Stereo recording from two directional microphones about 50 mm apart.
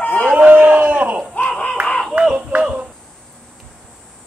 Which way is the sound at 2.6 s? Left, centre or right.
Right.